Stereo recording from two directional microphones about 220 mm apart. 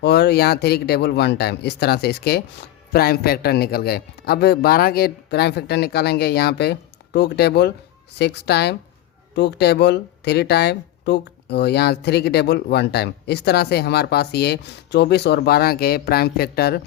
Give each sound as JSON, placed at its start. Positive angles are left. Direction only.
{"t": 0.0, "sound": "speech", "side_deg": 50}